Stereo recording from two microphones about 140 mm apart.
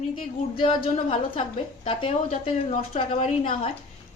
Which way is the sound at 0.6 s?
40° left (ahead or behind).